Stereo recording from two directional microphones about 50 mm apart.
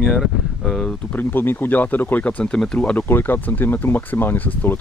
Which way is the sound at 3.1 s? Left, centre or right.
Left.